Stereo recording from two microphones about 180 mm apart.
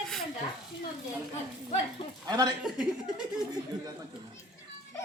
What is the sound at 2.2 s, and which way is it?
Speech, 20° right (ahead or behind).